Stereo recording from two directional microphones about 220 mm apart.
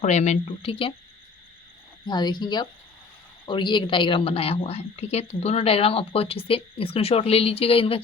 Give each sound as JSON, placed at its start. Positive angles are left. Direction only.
{"t": 0.0, "sound": "a woman's voice", "side_deg": 30}
{"t": 2.0, "sound": "a woman's voice", "side_deg": 20}